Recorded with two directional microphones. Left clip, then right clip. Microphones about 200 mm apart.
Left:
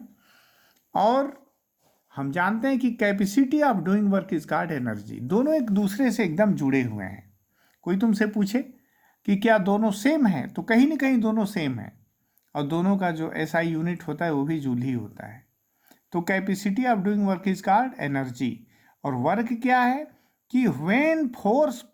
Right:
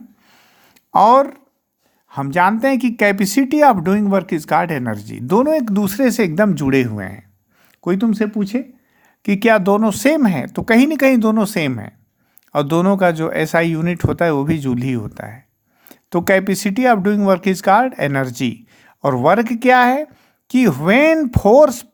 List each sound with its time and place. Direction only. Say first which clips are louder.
0.3 s a sound: right 8 dB; 35° right (ahead or behind)
2.0 s speech: right 11 dB; 40° right (ahead or behind); by 8.6 s 20° right (ahead or behind)
9.2 s speech: right 8 dB; 35° right (ahead or behind)